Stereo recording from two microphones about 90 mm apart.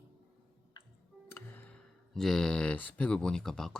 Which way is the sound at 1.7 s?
5° left (ahead or behind).